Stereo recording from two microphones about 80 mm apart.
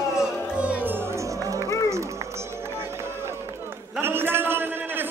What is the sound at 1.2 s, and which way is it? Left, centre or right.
Music, right.